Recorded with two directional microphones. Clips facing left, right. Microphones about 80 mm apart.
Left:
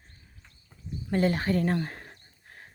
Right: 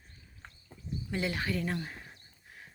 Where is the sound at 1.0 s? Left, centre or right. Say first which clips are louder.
Left 8 dB; left.